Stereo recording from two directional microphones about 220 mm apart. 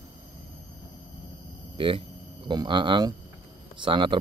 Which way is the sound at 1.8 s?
20° right (ahead or behind).